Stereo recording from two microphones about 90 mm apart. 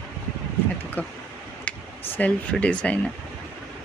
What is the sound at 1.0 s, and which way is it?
Speech, 20° left (ahead or behind).